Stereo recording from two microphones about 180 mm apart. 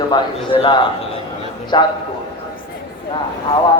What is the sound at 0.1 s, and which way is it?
A man's voice, 30° left (ahead or behind).